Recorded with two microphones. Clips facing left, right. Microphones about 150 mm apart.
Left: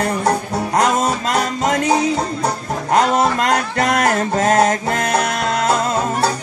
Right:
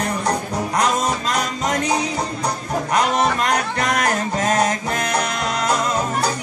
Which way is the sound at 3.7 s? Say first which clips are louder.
Left 4 dB; 30° left (ahead or behind).